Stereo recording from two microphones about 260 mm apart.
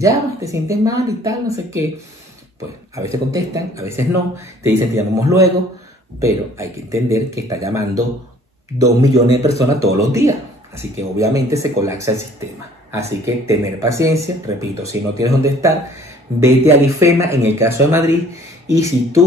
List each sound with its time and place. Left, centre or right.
0.0 s speech: centre
2.9 s speech: centre